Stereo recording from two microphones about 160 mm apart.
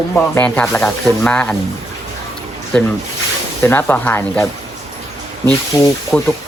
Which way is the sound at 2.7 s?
5° left (ahead or behind).